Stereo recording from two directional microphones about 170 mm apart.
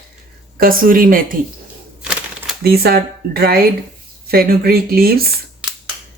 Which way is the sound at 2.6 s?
65° right (ahead or behind).